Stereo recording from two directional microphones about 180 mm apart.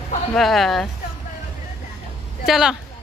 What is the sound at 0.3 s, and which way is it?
Speech, centre (ahead or behind).